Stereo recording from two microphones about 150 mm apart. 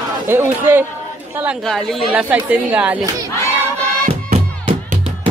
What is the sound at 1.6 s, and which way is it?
Speech, centre (ahead or behind).